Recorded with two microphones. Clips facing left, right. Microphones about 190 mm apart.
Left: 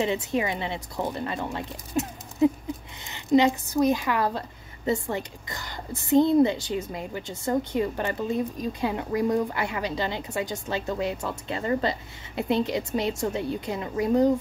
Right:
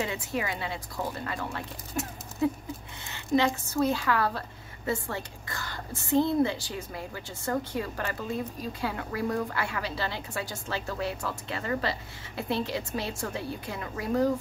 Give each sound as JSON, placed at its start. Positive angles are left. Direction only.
{"t": 0.0, "sound": "a woman's voice", "side_deg": 20}